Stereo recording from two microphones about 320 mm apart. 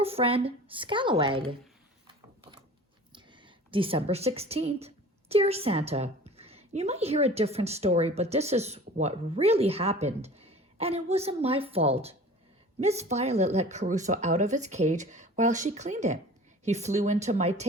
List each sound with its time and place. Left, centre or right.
0.0 s speech: centre
3.1 s a woman's voice: centre